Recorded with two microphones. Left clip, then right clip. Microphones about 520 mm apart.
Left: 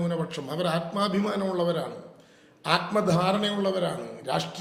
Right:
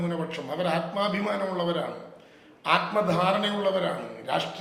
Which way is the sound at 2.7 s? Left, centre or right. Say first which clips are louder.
Right 1 dB; left.